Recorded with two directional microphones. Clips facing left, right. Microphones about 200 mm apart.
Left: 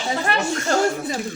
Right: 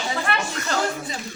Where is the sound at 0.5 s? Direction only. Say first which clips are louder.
Left 5 dB; 45° left (ahead or behind).